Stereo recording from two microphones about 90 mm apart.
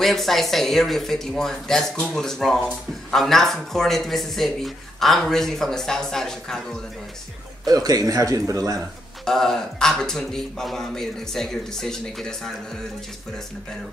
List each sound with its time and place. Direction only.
0.0 s speech: centre (ahead or behind)
7.6 s a man's voice: 45° right (ahead or behind)
9.2 s speech: 5° left (ahead or behind)